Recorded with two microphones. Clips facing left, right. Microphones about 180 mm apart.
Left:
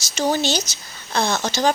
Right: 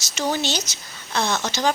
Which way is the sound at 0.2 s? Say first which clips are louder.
Left 4 dB; 35° left (ahead or behind).